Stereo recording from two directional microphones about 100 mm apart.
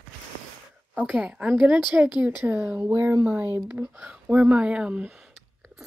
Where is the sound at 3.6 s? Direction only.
15° right (ahead or behind).